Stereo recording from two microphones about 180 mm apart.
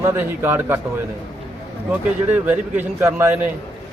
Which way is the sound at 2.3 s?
10° right (ahead or behind).